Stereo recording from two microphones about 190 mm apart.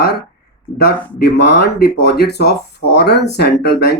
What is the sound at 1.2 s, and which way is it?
Speech, 60° left (ahead or behind).